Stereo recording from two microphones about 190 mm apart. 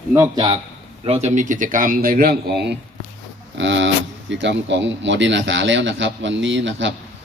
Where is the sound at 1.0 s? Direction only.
35° right (ahead or behind); by 2.5 s 50° right (ahead or behind).